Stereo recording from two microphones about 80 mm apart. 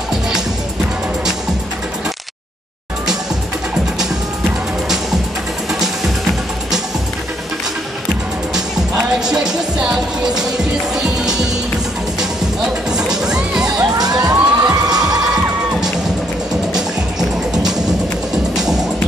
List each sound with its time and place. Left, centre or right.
8.5 s music: centre
13.9 s a sound: right
16.7 s music: centre